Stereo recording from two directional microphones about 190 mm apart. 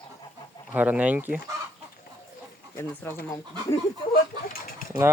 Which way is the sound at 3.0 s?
10° left (ahead or behind).